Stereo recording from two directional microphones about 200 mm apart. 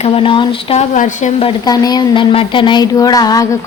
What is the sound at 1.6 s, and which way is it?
Speech, 20° left (ahead or behind).